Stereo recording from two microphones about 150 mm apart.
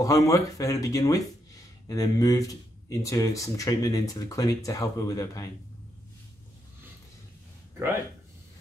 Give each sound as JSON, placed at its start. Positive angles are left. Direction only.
{"t": 0.0, "sound": "speech", "side_deg": 20}